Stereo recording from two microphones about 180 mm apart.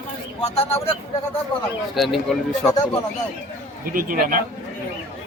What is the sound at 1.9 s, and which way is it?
Speech, centre (ahead or behind).